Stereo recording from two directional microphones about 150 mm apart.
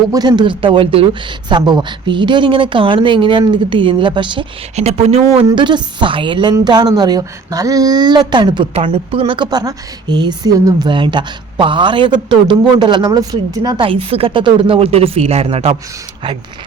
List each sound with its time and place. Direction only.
0.1 s a woman's voice: 30° right (ahead or behind)
4.7 s speech: 45° right (ahead or behind)
5.5 s a woman's voice: 30° right (ahead or behind)